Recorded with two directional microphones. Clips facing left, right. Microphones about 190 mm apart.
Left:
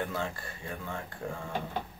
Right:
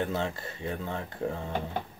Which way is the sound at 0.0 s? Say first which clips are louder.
Right 4 dB; 25° right (ahead or behind).